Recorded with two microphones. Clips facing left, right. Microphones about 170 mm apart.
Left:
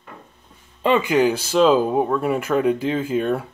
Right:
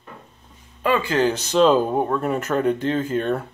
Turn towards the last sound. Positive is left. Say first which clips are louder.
# left 1 dB
turn(degrees=5)  # may be behind; listen again after turning